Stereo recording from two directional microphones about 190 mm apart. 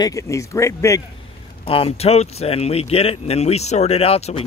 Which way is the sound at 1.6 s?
30° left (ahead or behind).